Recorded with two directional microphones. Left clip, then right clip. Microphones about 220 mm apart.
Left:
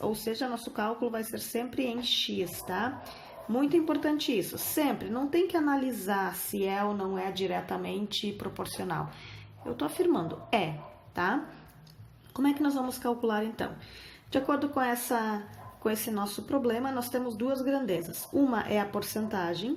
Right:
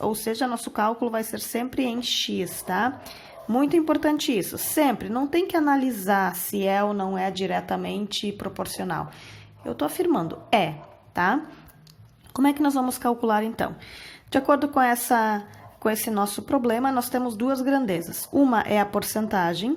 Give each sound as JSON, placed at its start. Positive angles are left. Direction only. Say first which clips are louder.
{"t": 0.0, "sound": "speech", "louder": "right 6 dB", "side_deg": -40}